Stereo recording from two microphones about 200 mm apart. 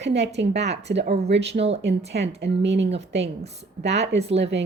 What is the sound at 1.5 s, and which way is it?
Speech, 30° right (ahead or behind).